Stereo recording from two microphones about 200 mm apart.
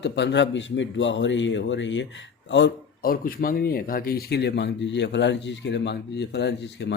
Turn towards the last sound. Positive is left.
turn(degrees=60)  # may be behind; listen again after turning